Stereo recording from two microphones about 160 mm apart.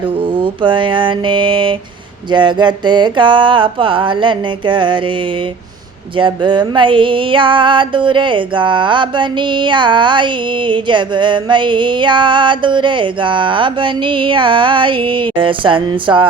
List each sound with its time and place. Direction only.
0.2 s music: 30° right (ahead or behind)